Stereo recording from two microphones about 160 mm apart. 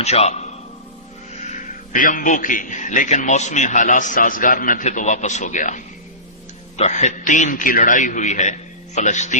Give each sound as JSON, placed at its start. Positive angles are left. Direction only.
{"t": 0.0, "sound": "a man's voice", "side_deg": 45}
{"t": 1.9, "sound": "a man's voice", "side_deg": 55}